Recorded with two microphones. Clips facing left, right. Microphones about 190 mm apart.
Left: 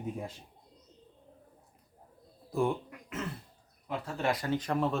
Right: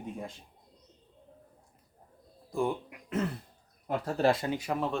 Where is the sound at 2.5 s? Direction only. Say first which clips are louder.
Left 1 dB; centre (ahead or behind).